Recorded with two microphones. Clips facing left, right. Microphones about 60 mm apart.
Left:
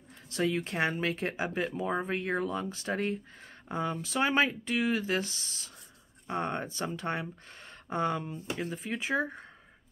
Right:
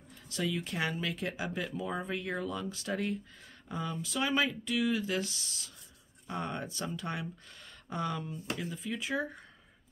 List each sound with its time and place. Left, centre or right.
0.3 s speech: left